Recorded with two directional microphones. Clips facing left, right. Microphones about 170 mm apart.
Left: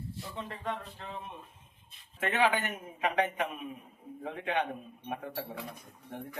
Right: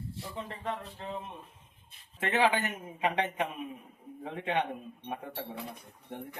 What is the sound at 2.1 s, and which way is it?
A man's voice, 30° right (ahead or behind).